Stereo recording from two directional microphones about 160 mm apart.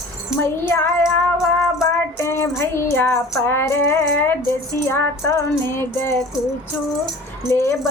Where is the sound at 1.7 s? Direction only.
20° left (ahead or behind).